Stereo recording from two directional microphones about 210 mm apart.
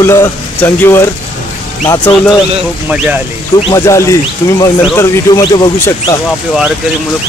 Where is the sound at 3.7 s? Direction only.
15° left (ahead or behind).